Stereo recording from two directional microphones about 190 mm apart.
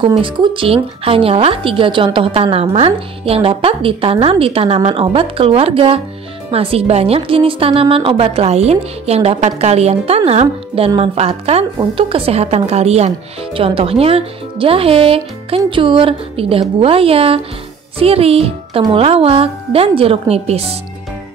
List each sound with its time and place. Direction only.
0.2 s a woman's voice: 25° right (ahead or behind)